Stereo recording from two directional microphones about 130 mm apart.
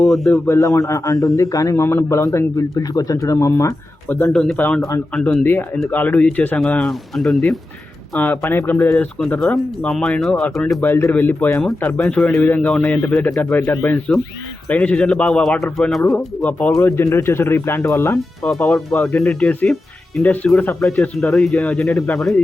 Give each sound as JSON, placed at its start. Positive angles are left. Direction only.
{"t": 0.0, "sound": "speech", "side_deg": 0}
{"t": 0.4, "sound": "speech", "side_deg": 25}
{"t": 4.1, "sound": "speech", "side_deg": 10}
{"t": 4.8, "sound": "speech", "side_deg": 25}
{"t": 5.1, "sound": "speech", "side_deg": 10}
{"t": 8.1, "sound": "speech", "side_deg": 15}
{"t": 16.1, "sound": "speech", "side_deg": 10}
{"t": 18.4, "sound": "speech", "side_deg": 10}